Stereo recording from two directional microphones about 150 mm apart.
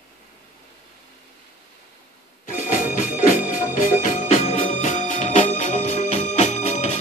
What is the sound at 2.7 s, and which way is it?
Music, 60° left (ahead or behind).